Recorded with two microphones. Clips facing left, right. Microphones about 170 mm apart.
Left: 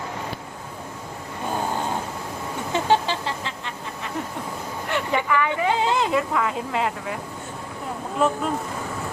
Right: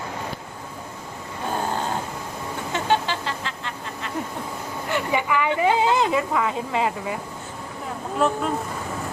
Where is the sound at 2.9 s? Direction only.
25° left (ahead or behind).